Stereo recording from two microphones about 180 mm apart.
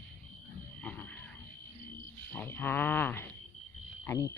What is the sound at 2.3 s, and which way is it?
Speech, 10° left (ahead or behind).